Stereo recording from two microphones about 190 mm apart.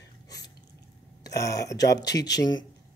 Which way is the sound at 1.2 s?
15° left (ahead or behind).